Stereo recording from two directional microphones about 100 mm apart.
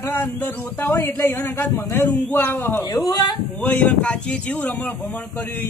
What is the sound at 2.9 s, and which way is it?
Speech, 45° left (ahead or behind).